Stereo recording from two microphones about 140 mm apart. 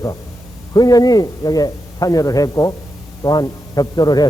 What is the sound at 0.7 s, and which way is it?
A man's voice, 25° left (ahead or behind).